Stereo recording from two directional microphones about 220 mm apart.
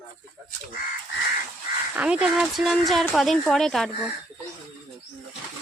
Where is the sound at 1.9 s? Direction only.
5° right (ahead or behind).